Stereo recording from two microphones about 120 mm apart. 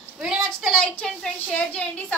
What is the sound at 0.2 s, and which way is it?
A woman's voice, 5° right (ahead or behind).